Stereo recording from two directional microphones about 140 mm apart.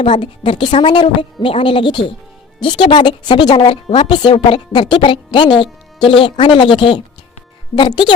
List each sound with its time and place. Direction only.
0.1 s a woman's voice: 35° left (ahead or behind)